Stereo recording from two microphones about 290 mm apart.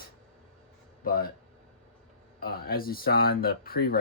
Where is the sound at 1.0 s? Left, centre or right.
Left.